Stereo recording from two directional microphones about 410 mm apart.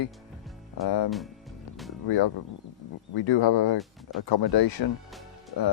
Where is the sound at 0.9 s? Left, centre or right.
Left.